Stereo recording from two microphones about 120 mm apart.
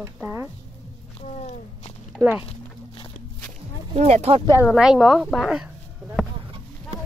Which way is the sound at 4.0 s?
65° right (ahead or behind).